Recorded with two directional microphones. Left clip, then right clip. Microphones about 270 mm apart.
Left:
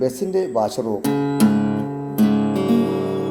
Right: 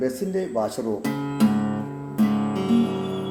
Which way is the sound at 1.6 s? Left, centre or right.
Left.